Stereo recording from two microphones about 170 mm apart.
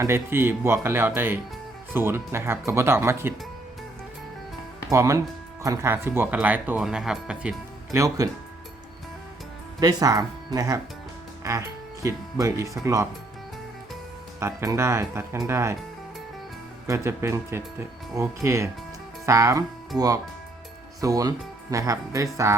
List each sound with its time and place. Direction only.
0.0 s speech: 15° right (ahead or behind)
4.9 s speech: 20° right (ahead or behind)
7.9 s speech: 20° right (ahead or behind)
9.8 s speech: 20° right (ahead or behind)
14.3 s speech: 15° right (ahead or behind)
16.8 s speech: 15° right (ahead or behind)
19.9 s speech: 5° right (ahead or behind)
21.0 s speech: 20° right (ahead or behind)